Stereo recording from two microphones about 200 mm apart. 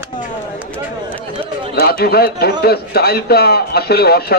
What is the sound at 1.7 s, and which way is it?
A man's voice, 50° left (ahead or behind).